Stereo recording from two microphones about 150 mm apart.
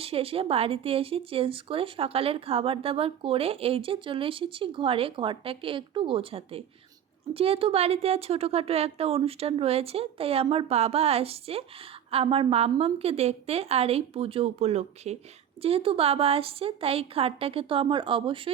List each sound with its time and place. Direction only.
0.0 s speech: 40° right (ahead or behind)